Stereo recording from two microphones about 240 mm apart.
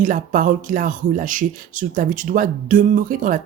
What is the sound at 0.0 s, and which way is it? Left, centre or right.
Speech, right.